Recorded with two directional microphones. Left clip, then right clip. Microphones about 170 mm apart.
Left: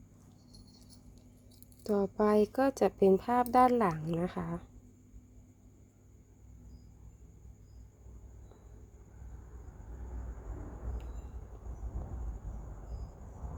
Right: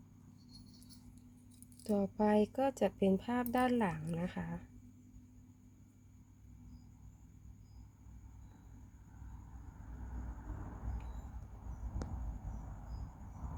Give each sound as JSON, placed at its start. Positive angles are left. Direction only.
{"t": 1.8, "sound": "a woman's voice", "side_deg": 25}